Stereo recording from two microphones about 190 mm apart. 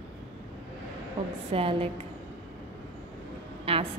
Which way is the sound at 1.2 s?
30° right (ahead or behind).